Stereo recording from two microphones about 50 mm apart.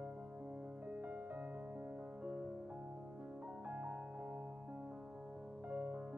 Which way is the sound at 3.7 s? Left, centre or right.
Right.